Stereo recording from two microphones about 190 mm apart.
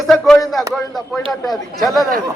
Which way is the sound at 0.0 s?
Centre (ahead or behind).